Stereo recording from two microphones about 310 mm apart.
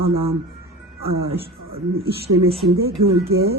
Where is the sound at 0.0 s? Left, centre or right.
Centre.